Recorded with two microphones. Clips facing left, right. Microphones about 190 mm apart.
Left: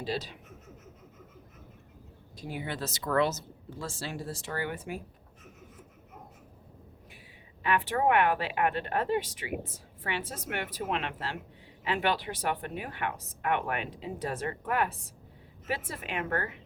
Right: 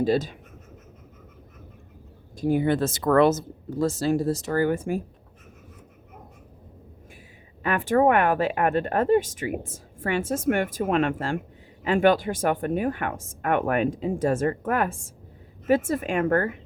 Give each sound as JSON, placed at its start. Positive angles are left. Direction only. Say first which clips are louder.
{"t": 0.0, "sound": "speech", "louder": "right 12 dB", "side_deg": -50}
{"t": 2.4, "sound": "speech", "louder": "right 14 dB", "side_deg": -50}
{"t": 7.6, "sound": "speech", "louder": "right 7 dB", "side_deg": -45}